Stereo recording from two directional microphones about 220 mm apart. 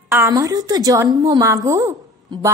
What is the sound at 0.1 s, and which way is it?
A woman's voice, 15° right (ahead or behind).